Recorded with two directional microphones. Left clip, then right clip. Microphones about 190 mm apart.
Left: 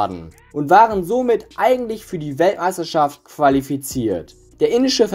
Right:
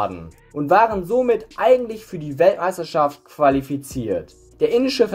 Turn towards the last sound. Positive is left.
turn(degrees=10)  # may be behind; listen again after turning